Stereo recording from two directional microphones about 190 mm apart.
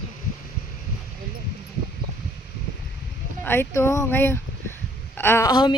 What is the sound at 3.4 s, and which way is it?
A woman's voice, 10° left (ahead or behind).